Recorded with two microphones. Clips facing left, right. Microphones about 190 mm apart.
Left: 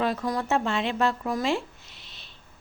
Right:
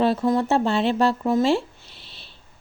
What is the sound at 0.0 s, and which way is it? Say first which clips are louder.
A woman's voice: right 7 dB; 30° right (ahead or behind).